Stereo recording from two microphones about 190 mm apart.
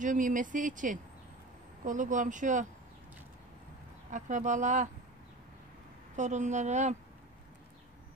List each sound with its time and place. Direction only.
0.0 s a woman's voice: 45° right (ahead or behind)
4.1 s a woman's voice: 40° right (ahead or behind)
6.1 s a woman's voice: 40° right (ahead or behind)